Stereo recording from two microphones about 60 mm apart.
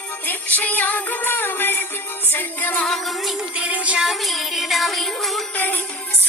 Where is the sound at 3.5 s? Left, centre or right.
Right.